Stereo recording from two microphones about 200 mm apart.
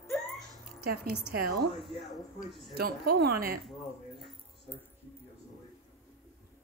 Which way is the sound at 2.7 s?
50° right (ahead or behind).